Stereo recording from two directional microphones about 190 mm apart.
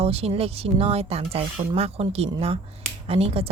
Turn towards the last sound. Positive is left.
turn(degrees=-30)  # may be behind; listen again after turning